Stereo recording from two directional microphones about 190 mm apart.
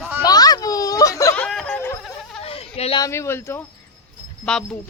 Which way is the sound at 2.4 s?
30° left (ahead or behind).